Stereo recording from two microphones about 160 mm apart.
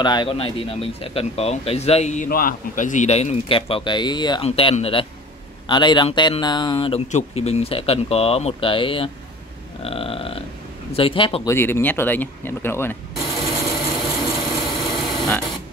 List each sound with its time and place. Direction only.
0.0 s speech: 30° left (ahead or behind); by 2.2 s 45° left (ahead or behind)
2.2 s speech: 60° left (ahead or behind); by 4.5 s 25° left (ahead or behind)
4.5 s speech: 40° left (ahead or behind)
9.8 s a sound: 35° left (ahead or behind)
10.9 s speech: 35° left (ahead or behind)
11.4 s speech: 15° left (ahead or behind)
13.5 s tools: 30° left (ahead or behind)